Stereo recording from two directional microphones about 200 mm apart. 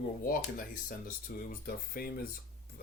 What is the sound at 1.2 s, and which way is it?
Speech, 45° left (ahead or behind).